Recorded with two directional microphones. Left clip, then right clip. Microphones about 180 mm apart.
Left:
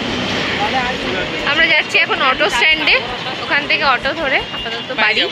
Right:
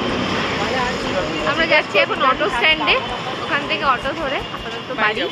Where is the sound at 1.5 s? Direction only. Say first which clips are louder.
Left 3 dB; 5° left (ahead or behind).